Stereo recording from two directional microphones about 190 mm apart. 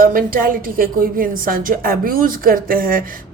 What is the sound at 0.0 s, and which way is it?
A woman's voice, 50° right (ahead or behind).